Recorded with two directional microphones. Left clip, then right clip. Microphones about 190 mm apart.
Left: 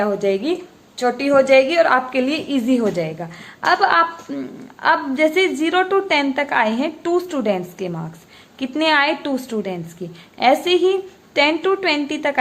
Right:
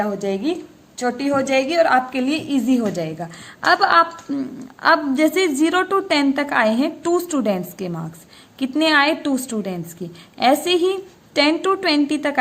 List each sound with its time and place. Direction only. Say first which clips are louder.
0.0 s a woman's voice: left 3 dB; 20° right (ahead or behind)